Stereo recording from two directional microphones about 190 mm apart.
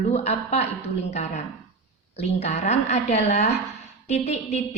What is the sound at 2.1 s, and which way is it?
A woman's voice, 35° left (ahead or behind).